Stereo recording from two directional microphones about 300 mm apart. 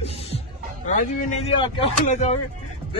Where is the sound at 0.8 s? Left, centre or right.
Left.